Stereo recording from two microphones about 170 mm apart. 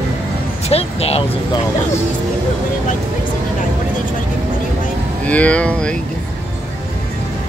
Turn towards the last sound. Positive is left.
turn(degrees=5)  # may be behind; listen again after turning